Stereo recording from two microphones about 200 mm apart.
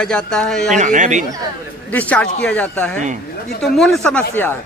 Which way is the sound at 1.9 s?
5° left (ahead or behind).